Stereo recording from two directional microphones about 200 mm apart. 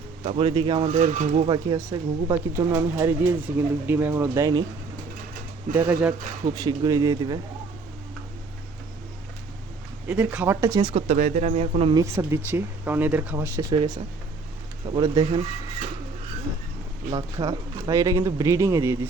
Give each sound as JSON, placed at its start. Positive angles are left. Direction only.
{"t": 0.2, "sound": "speech", "side_deg": -30}
{"t": 5.7, "sound": "speech", "side_deg": -10}
{"t": 6.4, "sound": "speech", "side_deg": -20}
{"t": 10.1, "sound": "speech", "side_deg": -5}
{"t": 11.1, "sound": "speech", "side_deg": -35}
{"t": 11.9, "sound": "speech", "side_deg": -15}
{"t": 17.1, "sound": "speech", "side_deg": -20}